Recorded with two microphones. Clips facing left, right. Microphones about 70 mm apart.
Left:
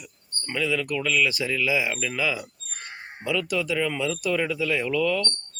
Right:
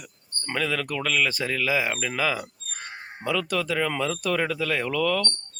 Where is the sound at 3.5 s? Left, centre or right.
Right.